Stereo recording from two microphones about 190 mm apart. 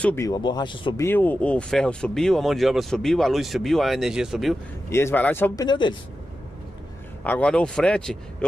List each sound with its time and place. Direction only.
0.0 s speech: 15° left (ahead or behind)
1.0 s speech: 10° left (ahead or behind)
4.8 s speech: 15° left (ahead or behind)
5.7 s speech: 25° left (ahead or behind)
7.2 s speech: 5° left (ahead or behind)